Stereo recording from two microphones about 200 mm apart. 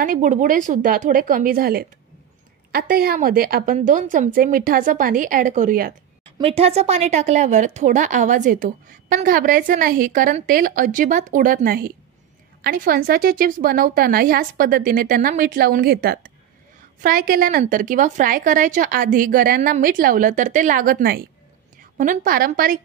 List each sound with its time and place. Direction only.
0.0 s a woman's voice: 40° right (ahead or behind)
6.2 s a woman's voice: 30° right (ahead or behind); by 22.8 s 45° right (ahead or behind)